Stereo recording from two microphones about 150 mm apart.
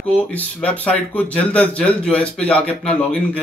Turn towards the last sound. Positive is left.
turn(degrees=5)  # may be behind; listen again after turning